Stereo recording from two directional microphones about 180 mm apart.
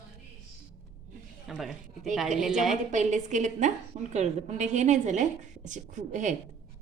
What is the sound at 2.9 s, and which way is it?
A woman's voice, 40° right (ahead or behind).